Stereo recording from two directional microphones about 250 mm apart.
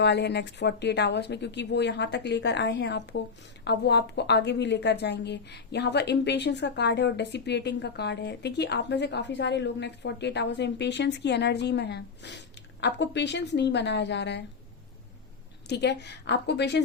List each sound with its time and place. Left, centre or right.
0.0 s a woman's voice: left
15.7 s a woman's voice: left